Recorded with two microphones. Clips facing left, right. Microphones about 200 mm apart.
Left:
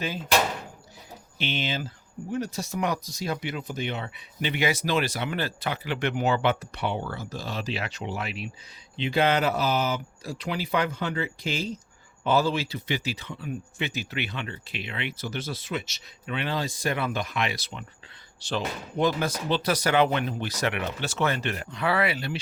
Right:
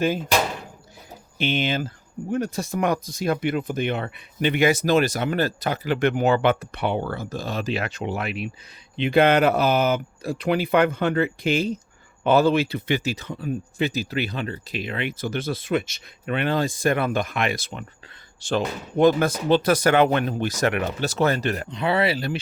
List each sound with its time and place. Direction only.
1.4 s speech: 50° right (ahead or behind)
21.7 s speech: 20° right (ahead or behind)